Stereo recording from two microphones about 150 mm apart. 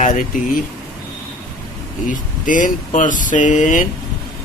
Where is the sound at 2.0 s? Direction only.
60° left (ahead or behind).